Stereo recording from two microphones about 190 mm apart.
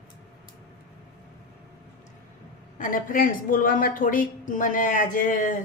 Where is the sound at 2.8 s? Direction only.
45° left (ahead or behind).